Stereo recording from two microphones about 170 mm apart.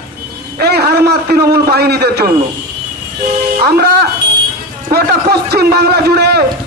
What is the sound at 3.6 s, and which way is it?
Music, 70° right (ahead or behind).